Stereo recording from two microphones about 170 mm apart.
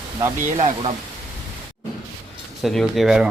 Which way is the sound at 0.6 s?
35° right (ahead or behind).